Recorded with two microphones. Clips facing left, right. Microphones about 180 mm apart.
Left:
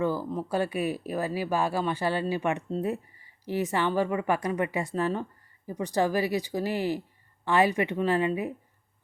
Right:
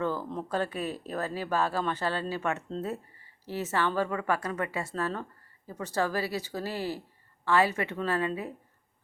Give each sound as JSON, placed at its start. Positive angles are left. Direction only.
{"t": 0.0, "sound": "speech", "side_deg": 10}